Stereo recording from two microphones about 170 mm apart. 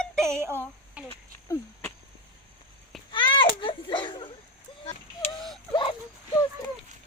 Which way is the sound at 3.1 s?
30° left (ahead or behind).